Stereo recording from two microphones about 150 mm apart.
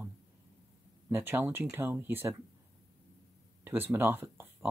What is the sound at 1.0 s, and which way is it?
Speech, 15° right (ahead or behind).